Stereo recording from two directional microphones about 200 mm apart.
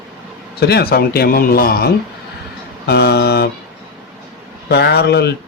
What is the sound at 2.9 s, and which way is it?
Speech, 55° left (ahead or behind).